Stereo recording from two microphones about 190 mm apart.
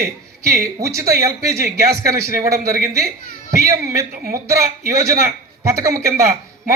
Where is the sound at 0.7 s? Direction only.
15° right (ahead or behind).